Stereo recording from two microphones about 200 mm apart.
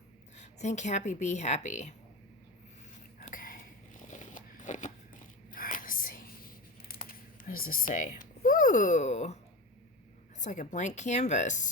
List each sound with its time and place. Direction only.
0.3 s speech: 35° left (ahead or behind)
3.2 s a sound: 40° left (ahead or behind)
5.5 s whispering: 45° left (ahead or behind)
7.6 s speech: 45° left (ahead or behind)
10.4 s speech: 40° left (ahead or behind)